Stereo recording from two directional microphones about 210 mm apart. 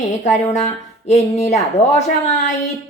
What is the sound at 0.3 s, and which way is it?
Speech, 35° left (ahead or behind).